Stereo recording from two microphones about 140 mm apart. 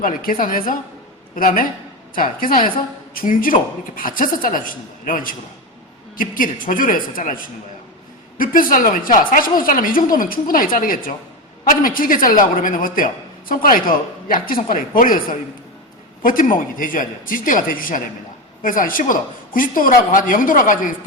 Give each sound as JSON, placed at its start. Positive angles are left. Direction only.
{"t": 0.0, "sound": "a woman's voice", "side_deg": 80}
{"t": 13.5, "sound": "a woman's voice", "side_deg": 90}